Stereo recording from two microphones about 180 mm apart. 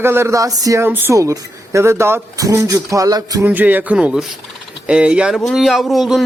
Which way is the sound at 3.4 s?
10° right (ahead or behind).